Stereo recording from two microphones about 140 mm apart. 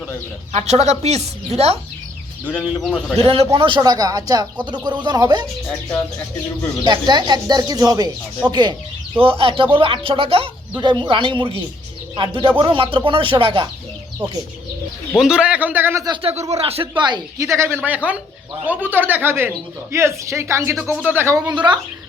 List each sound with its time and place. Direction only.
0.5 s speech: 55° right (ahead or behind)
2.5 s a man's voice: 5° right (ahead or behind)
3.2 s speech: 45° right (ahead or behind)
6.8 s speech: 30° right (ahead or behind)
15.2 s a man's voice: 5° right (ahead or behind)
16.6 s speech: 45° right (ahead or behind)
16.9 s speech: 35° right (ahead or behind)
17.3 s a man's voice: 20° right (ahead or behind)